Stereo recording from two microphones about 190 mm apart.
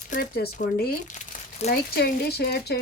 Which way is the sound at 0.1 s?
45° left (ahead or behind).